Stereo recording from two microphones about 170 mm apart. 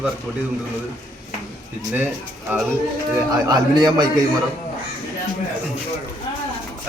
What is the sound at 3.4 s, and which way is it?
Speech, 25° right (ahead or behind).